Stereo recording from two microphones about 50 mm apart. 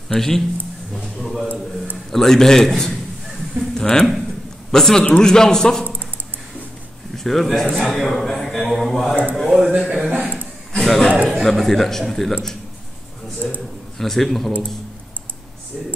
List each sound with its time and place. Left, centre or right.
0.1 s a man's voice: centre
7.2 s a man's voice: centre
9.8 s speech: centre
10.0 s a sound: right
10.8 s a man's voice: centre
13.9 s a man's voice: centre